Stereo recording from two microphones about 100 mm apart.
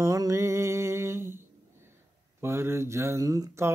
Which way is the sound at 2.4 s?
25° right (ahead or behind).